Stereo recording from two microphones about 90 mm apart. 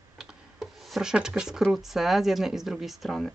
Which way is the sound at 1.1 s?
10° right (ahead or behind).